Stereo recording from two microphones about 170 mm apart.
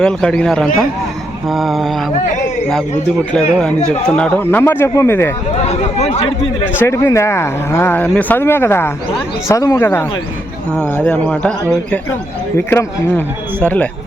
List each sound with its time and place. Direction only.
0.0 s a man's voice: 5° left (ahead or behind)
4.2 s speech: 10° left (ahead or behind)
5.6 s speech: 40° left (ahead or behind)
6.7 s speech: 15° left (ahead or behind)